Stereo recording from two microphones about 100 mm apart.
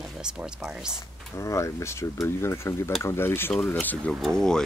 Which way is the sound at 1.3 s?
30° left (ahead or behind).